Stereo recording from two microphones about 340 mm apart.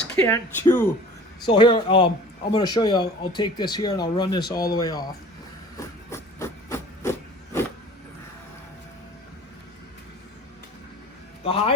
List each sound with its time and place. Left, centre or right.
0.0 s speech: centre
6.1 s hiss: centre
11.4 s speech: centre